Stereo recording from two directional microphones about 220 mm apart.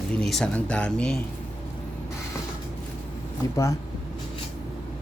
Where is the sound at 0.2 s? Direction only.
Centre (ahead or behind).